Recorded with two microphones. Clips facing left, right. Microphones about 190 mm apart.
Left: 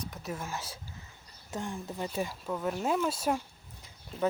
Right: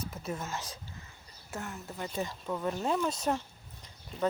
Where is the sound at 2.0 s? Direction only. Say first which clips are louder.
Even; 10° left (ahead or behind).